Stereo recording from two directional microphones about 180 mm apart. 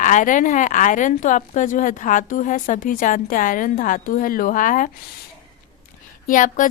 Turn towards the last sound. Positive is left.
turn(degrees=45)  # may be behind; listen again after turning